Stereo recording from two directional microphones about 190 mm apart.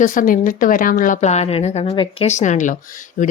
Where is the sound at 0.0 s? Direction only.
45° left (ahead or behind).